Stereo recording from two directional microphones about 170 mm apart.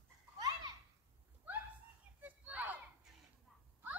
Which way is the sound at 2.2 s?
10° right (ahead or behind).